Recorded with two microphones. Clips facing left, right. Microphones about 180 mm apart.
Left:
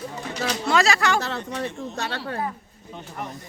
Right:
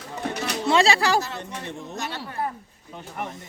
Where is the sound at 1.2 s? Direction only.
65° left (ahead or behind).